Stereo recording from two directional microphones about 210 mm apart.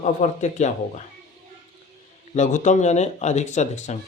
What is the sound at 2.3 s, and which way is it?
Speech, 35° left (ahead or behind).